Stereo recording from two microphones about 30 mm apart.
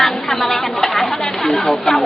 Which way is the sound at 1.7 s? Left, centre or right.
Left.